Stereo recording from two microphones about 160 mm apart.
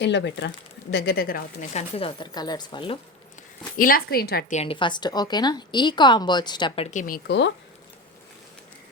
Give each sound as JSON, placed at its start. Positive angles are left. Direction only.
{"t": 0.0, "sound": "speech", "side_deg": 90}
{"t": 1.7, "sound": "a woman's voice", "side_deg": 35}
{"t": 3.8, "sound": "speech", "side_deg": 65}
{"t": 4.5, "sound": "a woman's voice", "side_deg": 35}
{"t": 6.9, "sound": "speech", "side_deg": 60}